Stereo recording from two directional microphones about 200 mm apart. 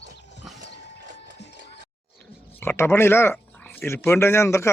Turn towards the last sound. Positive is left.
turn(degrees=15)  # may be behind; listen again after turning